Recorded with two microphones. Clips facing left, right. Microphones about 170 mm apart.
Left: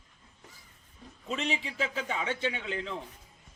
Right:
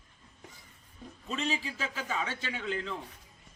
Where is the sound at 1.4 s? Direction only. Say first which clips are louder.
Left 1 dB; 20° left (ahead or behind).